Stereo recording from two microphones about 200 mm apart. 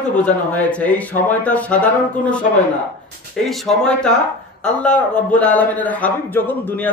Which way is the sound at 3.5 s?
Centre (ahead or behind).